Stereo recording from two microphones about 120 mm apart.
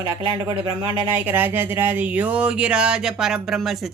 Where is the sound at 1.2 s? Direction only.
15° right (ahead or behind).